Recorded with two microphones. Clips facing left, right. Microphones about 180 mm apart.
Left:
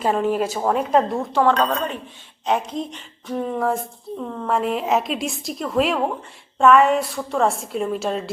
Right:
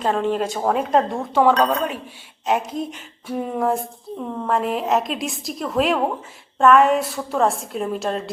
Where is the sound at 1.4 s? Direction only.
10° right (ahead or behind).